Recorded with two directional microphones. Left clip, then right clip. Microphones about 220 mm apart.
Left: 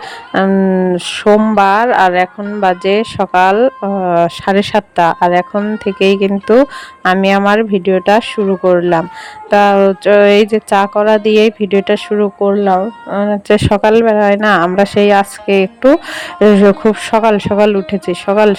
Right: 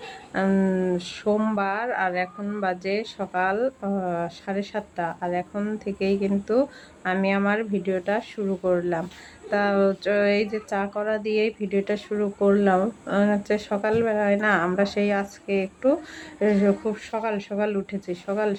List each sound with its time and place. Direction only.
0.3 s speech: 35° left (ahead or behind)